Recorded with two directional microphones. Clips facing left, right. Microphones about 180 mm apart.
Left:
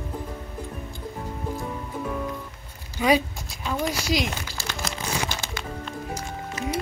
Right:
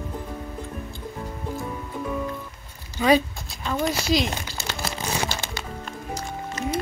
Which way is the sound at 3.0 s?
15° left (ahead or behind).